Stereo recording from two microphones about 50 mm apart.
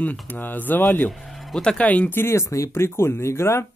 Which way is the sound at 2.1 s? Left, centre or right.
Left.